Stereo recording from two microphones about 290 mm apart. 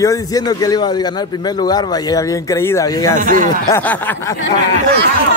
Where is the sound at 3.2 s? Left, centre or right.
Right.